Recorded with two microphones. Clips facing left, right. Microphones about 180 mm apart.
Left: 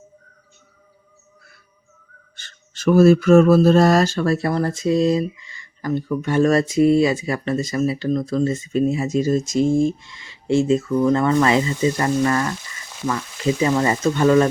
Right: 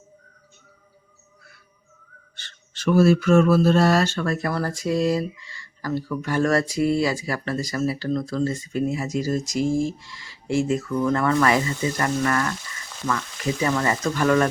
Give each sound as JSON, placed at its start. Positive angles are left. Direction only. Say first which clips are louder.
{"t": 2.3, "sound": "mantra", "louder": "left 1 dB", "side_deg": 45}